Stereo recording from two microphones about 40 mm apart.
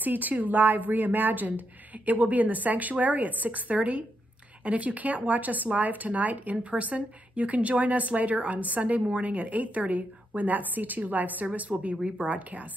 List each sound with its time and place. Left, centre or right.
0.0 s a woman's voice: right